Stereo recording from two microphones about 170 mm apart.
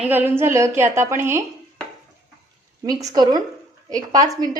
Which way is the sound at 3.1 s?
25° right (ahead or behind).